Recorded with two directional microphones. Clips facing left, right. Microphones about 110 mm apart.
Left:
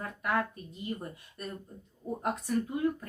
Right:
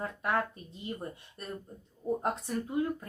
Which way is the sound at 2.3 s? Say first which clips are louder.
Left 1 dB; 25° right (ahead or behind).